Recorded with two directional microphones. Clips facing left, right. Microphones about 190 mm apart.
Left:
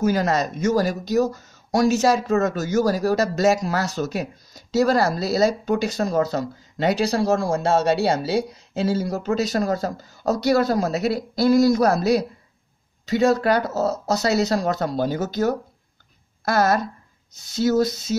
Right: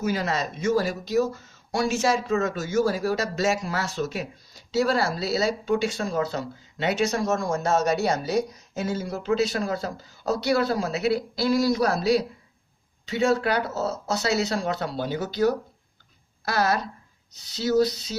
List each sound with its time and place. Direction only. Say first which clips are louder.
0.0 s speech: left 6 dB; 45° left (ahead or behind)